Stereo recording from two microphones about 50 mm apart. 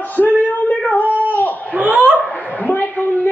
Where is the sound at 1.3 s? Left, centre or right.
Left.